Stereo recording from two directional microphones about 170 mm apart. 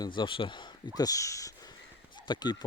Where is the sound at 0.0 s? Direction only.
25° left (ahead or behind).